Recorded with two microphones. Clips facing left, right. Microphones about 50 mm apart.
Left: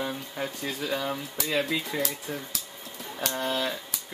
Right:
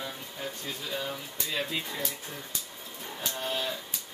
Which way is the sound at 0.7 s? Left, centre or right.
Left.